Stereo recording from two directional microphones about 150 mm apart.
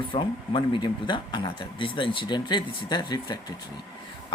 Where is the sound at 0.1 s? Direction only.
35° left (ahead or behind).